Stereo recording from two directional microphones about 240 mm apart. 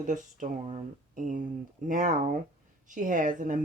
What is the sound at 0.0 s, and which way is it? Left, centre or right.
A woman's voice, right.